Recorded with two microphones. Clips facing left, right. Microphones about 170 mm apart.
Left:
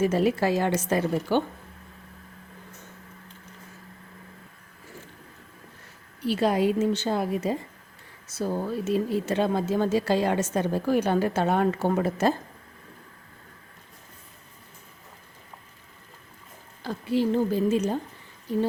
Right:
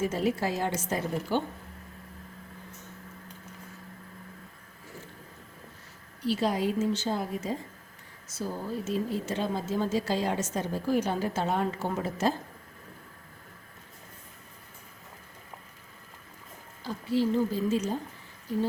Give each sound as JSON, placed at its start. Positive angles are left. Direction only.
{"t": 0.0, "sound": "a woman's voice", "side_deg": 70}
{"t": 6.2, "sound": "speech", "side_deg": 60}
{"t": 16.8, "sound": "a woman's voice", "side_deg": 60}